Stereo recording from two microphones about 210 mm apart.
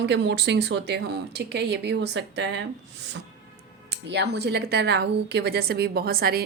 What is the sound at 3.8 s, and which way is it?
A woman's voice, 55° right (ahead or behind).